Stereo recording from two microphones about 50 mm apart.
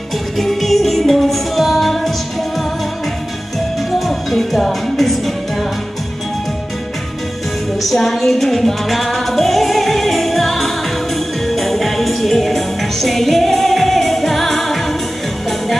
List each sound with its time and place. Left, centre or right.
0.4 s music: centre
4.0 s music: centre
7.9 s music: centre